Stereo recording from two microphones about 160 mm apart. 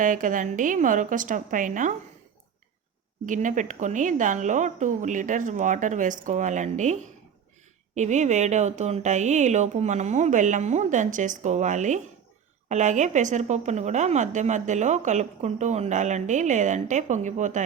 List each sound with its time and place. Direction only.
0.0 s a woman's voice: 55° right (ahead or behind)
3.2 s a woman's voice: 55° right (ahead or behind)
7.9 s a woman's voice: 45° right (ahead or behind)